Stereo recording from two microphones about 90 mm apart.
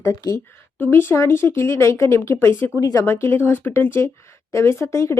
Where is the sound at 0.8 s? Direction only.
25° left (ahead or behind).